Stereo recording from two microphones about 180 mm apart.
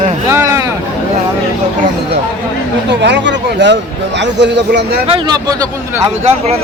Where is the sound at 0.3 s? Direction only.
15° right (ahead or behind).